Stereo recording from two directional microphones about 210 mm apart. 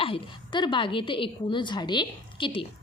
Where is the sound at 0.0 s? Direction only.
25° left (ahead or behind).